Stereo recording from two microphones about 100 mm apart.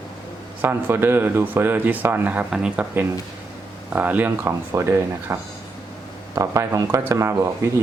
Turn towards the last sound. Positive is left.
turn(degrees=-30)  # may be behind; listen again after turning